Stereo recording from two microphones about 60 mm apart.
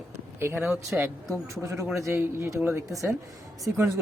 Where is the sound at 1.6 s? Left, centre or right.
Right.